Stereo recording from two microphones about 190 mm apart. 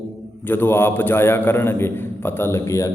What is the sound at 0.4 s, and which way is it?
A man's voice, 10° left (ahead or behind).